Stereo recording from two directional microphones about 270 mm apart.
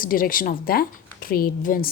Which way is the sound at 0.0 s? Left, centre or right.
Left.